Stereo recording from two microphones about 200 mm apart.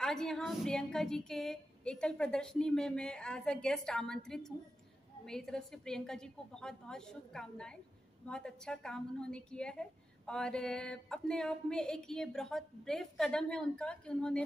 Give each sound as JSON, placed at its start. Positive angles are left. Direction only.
{"t": 0.0, "sound": "a woman's voice", "side_deg": 5}